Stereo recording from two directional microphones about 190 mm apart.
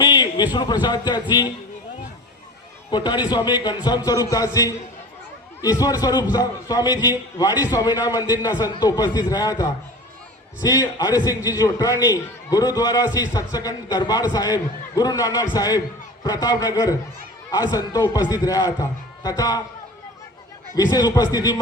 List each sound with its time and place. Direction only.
0.0 s a man's voice: 20° left (ahead or behind)
2.9 s a man's voice: 20° left (ahead or behind)
20.7 s a man's voice: 20° left (ahead or behind)